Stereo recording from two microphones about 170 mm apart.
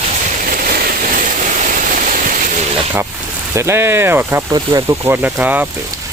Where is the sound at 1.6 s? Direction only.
50° right (ahead or behind).